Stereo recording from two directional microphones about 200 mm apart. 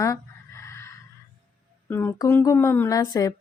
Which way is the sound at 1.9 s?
10° left (ahead or behind).